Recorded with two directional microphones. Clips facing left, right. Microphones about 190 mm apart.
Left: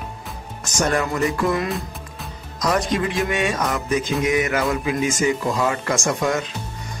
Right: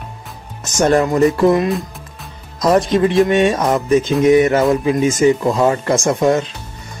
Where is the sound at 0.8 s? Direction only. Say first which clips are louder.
Right 8 dB; 30° right (ahead or behind).